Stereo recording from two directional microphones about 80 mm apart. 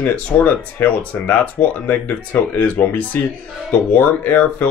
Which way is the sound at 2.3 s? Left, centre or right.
Left.